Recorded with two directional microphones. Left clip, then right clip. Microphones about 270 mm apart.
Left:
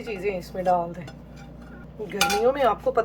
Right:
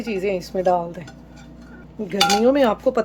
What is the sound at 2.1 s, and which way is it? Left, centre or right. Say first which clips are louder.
Speech: right 5 dB; right.